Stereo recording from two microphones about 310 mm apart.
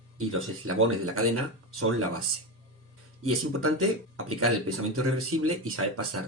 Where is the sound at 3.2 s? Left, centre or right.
Right.